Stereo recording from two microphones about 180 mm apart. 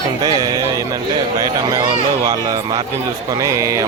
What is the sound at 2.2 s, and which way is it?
Speech, 20° right (ahead or behind).